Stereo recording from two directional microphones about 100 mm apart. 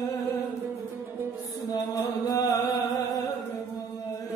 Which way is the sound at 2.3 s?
40° left (ahead or behind).